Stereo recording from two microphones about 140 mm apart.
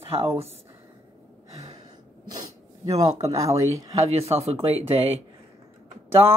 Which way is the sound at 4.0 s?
50° right (ahead or behind).